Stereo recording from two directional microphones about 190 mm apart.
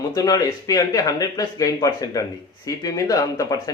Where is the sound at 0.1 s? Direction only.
20° left (ahead or behind).